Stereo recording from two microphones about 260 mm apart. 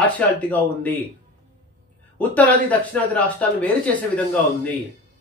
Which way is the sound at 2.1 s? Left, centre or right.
Centre.